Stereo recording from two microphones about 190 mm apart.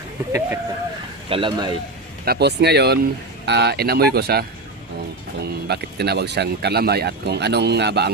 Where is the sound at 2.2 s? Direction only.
60° right (ahead or behind).